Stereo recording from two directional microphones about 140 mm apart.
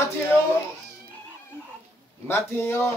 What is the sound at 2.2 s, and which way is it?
Speech, 15° left (ahead or behind).